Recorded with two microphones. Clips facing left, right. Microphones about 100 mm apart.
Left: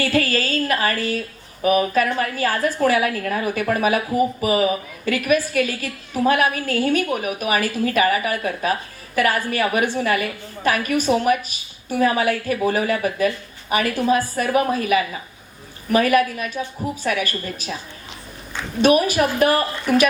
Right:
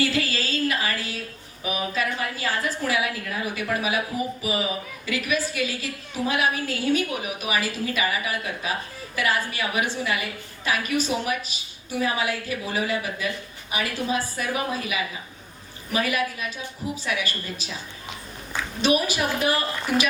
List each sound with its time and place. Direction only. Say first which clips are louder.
0.0 s a sound: left 5 dB; 55° left (ahead or behind)
1.6 s a woman's voice: left 9 dB; 50° left (ahead or behind)
18.8 s a woman's voice: left 7 dB; 50° left (ahead or behind)